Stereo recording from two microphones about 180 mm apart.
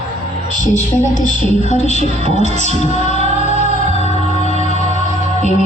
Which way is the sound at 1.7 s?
40° left (ahead or behind).